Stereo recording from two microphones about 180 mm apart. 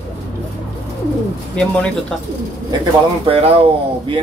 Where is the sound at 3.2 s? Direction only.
35° right (ahead or behind).